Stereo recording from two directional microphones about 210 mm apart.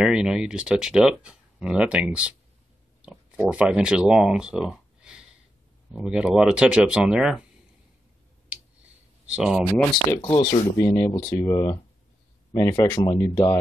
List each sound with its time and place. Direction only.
0.0 s speech: 5° right (ahead or behind)
9.3 s speech: 5° right (ahead or behind)
10.2 s speech: 25° left (ahead or behind)